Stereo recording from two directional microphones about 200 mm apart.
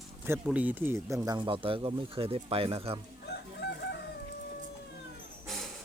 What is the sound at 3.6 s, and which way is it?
Chicken, 50° left (ahead or behind).